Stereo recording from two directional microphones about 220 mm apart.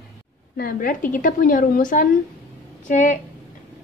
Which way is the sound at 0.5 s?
40° left (ahead or behind).